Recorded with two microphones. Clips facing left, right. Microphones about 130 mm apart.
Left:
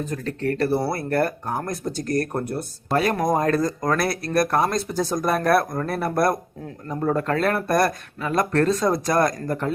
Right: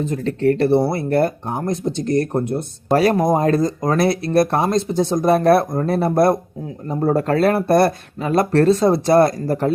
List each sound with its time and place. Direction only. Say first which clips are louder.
0.0 s speech: right 7 dB; 30° right (ahead or behind)
2.9 s speech: right 5 dB; 35° right (ahead or behind)